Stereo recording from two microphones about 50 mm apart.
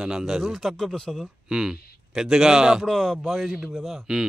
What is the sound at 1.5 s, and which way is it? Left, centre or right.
A man's voice, centre.